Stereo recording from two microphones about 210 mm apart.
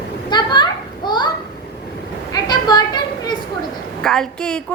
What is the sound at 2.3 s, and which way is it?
Children playing, 20° left (ahead or behind).